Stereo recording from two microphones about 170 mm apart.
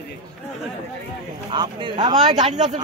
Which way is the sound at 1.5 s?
25° right (ahead or behind).